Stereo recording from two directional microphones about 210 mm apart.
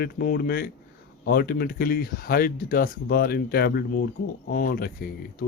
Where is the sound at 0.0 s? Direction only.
45° left (ahead or behind).